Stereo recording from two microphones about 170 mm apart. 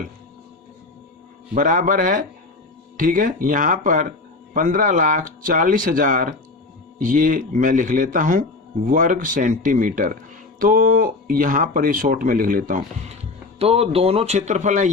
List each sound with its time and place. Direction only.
1.5 s speech: 50° right (ahead or behind)
13.6 s speech: 35° right (ahead or behind)